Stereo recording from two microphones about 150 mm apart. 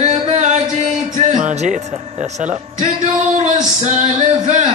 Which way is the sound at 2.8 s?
50° right (ahead or behind).